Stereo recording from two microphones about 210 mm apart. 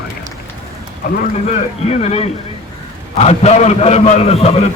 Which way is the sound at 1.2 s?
35° left (ahead or behind).